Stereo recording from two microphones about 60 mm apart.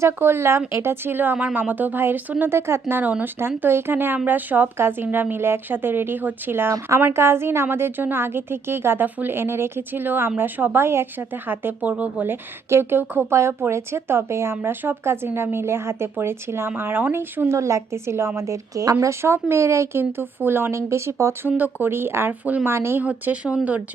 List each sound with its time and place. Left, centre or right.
0.0 s a woman's voice: right
2.9 s speech: right
3.6 s speech: right
11.4 s speech: right
12.2 s speech: right
17.5 s a woman's voice: right
18.3 s speech: right
19.2 s a woman's voice: right
21.6 s a woman's voice: right
23.0 s speech: right